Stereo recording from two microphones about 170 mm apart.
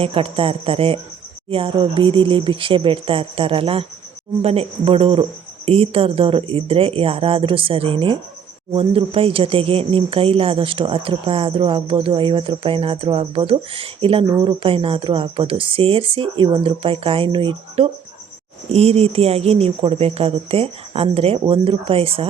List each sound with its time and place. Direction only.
0.0 s speech: 35° right (ahead or behind)